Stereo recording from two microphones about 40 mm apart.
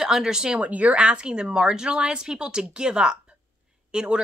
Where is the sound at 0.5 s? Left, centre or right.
Right.